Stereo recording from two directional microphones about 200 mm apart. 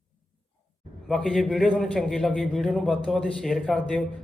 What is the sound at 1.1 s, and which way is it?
A man's voice, 5° left (ahead or behind).